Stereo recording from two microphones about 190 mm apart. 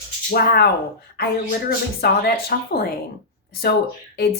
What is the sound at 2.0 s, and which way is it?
Speech, 55° left (ahead or behind).